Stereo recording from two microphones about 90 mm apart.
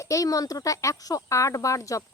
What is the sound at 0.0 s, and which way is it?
Speech, 35° left (ahead or behind).